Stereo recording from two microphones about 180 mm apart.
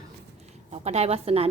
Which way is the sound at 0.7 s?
35° right (ahead or behind).